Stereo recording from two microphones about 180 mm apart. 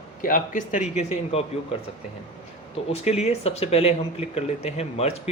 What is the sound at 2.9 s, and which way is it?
Speech, 35° left (ahead or behind).